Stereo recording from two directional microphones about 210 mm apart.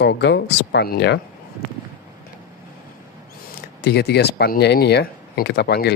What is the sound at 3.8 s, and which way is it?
Speech, 50° left (ahead or behind).